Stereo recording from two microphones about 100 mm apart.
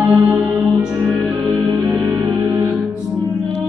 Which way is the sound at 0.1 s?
15° right (ahead or behind).